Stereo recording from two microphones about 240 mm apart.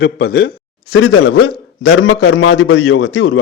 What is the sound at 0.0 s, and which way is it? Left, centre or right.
A man's voice, left.